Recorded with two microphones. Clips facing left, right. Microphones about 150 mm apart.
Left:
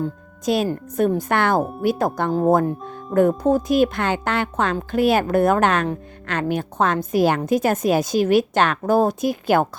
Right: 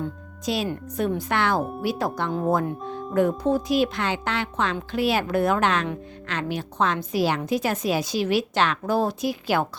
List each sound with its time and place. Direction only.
0.4 s speech: 50° left (ahead or behind)